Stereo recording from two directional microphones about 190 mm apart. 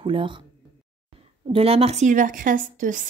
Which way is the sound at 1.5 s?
30° right (ahead or behind).